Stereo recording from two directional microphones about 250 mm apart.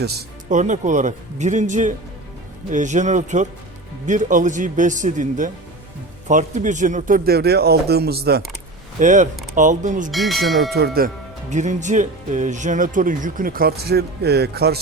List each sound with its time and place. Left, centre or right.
0.0 s speech: right
10.1 s speech: centre
10.8 s speech: right